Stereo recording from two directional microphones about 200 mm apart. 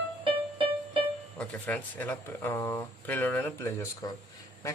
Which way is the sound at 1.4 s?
5° left (ahead or behind).